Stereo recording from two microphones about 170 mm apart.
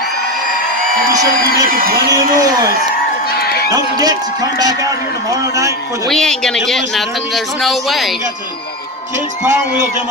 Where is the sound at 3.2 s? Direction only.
65° left (ahead or behind).